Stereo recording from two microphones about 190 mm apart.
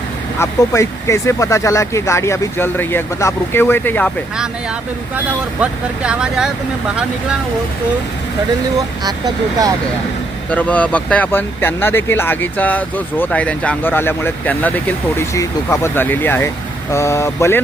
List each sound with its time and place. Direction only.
0.3 s speech: 15° left (ahead or behind)
5.1 s speech: 5° right (ahead or behind)
9.0 s speech: 20° right (ahead or behind)
10.5 s speech: 10° left (ahead or behind)